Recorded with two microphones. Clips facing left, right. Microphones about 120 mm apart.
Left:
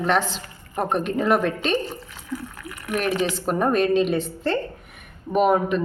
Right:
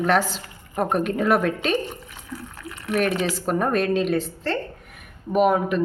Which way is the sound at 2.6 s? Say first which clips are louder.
Right 2 dB; 25° right (ahead or behind).